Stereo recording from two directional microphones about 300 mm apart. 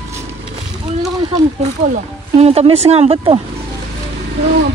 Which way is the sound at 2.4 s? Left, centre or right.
Centre.